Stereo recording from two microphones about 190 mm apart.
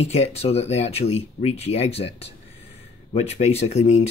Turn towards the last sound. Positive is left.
turn(degrees=35)  # may be behind; listen again after turning